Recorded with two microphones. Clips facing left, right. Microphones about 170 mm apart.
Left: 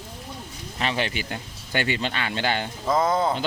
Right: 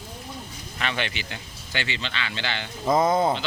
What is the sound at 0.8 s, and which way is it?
Speech, 35° left (ahead or behind).